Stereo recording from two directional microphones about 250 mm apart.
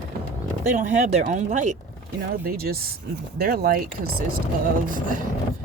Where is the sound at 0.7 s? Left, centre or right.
Right.